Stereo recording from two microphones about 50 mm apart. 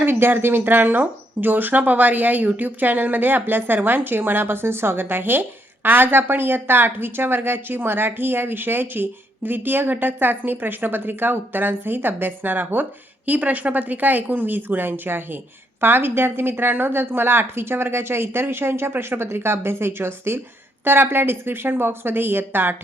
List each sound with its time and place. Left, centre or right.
0.0 s speech: right